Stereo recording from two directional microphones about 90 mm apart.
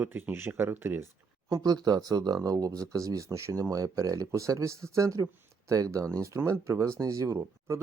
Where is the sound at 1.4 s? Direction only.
40° right (ahead or behind).